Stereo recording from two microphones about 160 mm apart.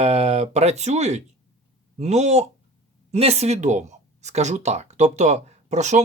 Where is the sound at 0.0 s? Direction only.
45° right (ahead or behind).